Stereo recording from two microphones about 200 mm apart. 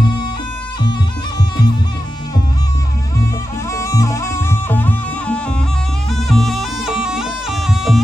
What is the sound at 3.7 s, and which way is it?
Music, 15° left (ahead or behind).